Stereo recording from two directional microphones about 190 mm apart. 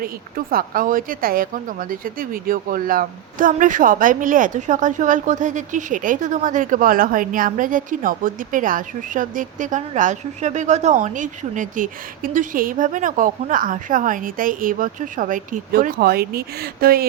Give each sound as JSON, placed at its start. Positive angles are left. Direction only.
{"t": 0.0, "sound": "speech", "side_deg": -50}